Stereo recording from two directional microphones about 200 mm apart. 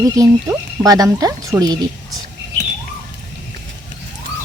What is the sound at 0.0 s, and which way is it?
Speech, 15° right (ahead or behind).